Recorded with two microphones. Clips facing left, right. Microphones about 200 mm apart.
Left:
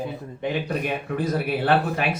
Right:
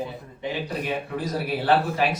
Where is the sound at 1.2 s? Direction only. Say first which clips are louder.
Left 6 dB; 55° left (ahead or behind).